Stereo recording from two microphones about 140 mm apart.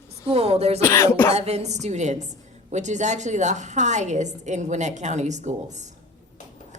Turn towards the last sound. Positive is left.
turn(degrees=-55)  # may be behind; listen again after turning